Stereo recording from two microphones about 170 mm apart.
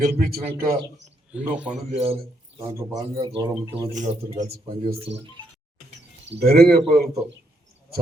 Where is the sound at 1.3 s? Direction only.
5° right (ahead or behind).